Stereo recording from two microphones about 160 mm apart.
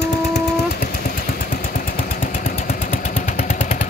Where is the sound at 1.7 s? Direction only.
60° left (ahead or behind).